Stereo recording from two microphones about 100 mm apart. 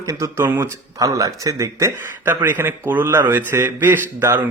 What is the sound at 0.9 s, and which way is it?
Speech, 35° right (ahead or behind).